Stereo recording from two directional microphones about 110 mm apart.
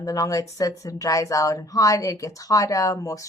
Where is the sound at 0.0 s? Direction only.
30° left (ahead or behind).